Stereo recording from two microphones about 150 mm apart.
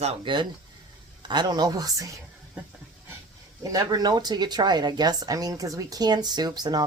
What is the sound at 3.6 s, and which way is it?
Speech, 25° right (ahead or behind).